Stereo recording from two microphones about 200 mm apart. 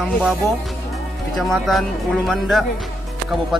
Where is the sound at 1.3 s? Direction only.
Centre (ahead or behind).